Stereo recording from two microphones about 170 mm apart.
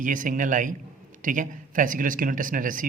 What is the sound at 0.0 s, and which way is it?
A man's voice, 50° right (ahead or behind).